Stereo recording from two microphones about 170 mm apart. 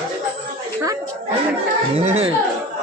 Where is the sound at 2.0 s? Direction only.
40° right (ahead or behind).